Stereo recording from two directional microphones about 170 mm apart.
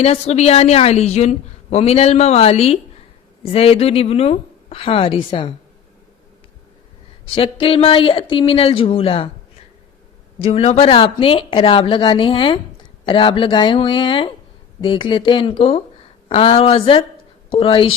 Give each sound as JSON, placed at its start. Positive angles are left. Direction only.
{"t": 0.0, "sound": "a woman's voice", "side_deg": 40}
{"t": 7.3, "sound": "a woman's voice", "side_deg": 35}
{"t": 10.4, "sound": "a woman's voice", "side_deg": 35}